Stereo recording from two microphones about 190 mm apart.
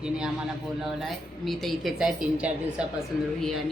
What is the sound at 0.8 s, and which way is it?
Speech, centre (ahead or behind).